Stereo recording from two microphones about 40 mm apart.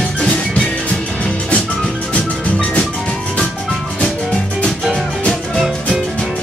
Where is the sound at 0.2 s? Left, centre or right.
Left.